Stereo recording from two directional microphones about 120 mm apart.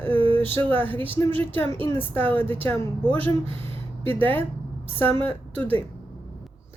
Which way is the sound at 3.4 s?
50° right (ahead or behind).